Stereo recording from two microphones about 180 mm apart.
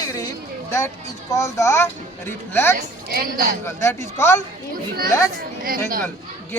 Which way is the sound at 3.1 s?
60° right (ahead or behind).